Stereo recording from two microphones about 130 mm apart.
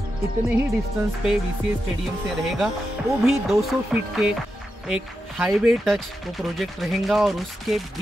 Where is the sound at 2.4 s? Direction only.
Centre (ahead or behind).